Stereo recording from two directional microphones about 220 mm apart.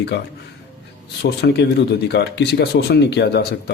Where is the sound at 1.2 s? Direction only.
50° left (ahead or behind).